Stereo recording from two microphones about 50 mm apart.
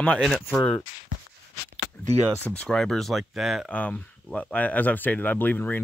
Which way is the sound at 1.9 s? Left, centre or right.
Left.